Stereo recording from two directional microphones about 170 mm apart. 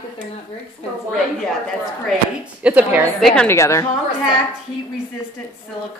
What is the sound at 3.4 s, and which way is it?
Speech, 15° left (ahead or behind).